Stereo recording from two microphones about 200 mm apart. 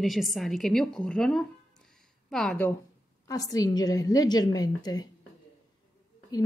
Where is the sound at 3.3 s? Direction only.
15° left (ahead or behind).